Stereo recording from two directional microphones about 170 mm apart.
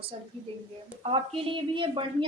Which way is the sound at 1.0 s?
30° right (ahead or behind).